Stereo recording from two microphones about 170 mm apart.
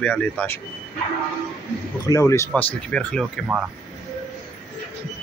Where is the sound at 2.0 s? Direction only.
20° left (ahead or behind).